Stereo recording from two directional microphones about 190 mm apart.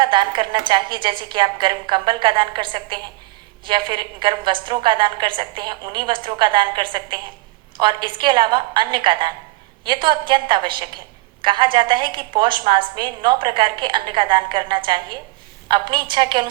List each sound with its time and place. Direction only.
0.0 s a woman's voice: 25° right (ahead or behind)